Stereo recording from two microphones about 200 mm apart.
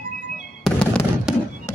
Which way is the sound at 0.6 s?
5° left (ahead or behind).